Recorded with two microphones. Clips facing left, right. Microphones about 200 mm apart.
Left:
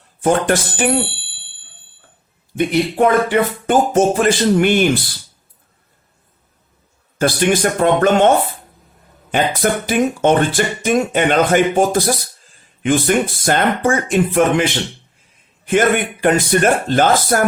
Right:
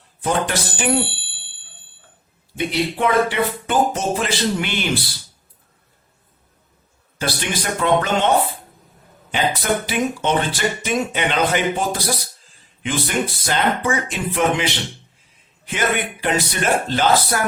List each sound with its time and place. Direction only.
0.2 s speech: 50° left (ahead or behind)
2.6 s speech: 45° left (ahead or behind)
7.2 s speech: 50° left (ahead or behind)
9.3 s speech: 50° left (ahead or behind)